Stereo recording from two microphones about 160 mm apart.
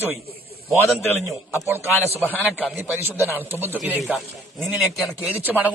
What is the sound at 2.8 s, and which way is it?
A man's voice, 15° right (ahead or behind).